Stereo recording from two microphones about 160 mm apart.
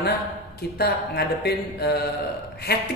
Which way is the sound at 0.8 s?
85° left.